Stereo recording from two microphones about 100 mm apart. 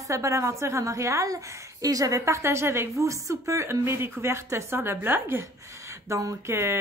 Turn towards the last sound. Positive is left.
turn(degrees=-25)  # may be behind; listen again after turning